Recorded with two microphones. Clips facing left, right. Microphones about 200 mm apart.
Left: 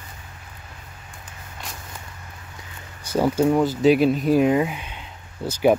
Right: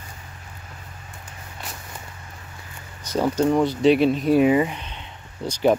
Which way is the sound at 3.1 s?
10° left (ahead or behind).